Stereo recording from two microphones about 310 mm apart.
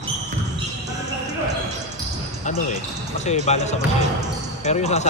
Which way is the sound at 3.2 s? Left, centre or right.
Left.